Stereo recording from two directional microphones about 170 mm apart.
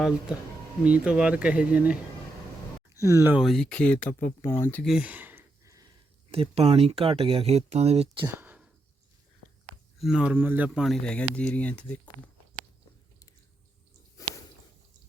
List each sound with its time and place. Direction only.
0.9 s speech: 5° right (ahead or behind)
3.3 s speech: centre (ahead or behind)
4.9 s a sound: 5° right (ahead or behind)
6.3 s speech: 35° right (ahead or behind)
8.4 s a sound: 10° right (ahead or behind)
10.0 s speech: 5° right (ahead or behind)